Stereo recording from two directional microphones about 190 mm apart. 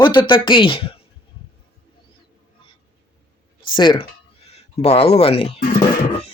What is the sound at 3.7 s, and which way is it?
Speech, 25° left (ahead or behind).